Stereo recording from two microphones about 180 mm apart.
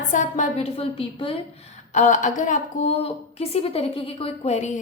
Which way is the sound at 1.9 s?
45° left (ahead or behind).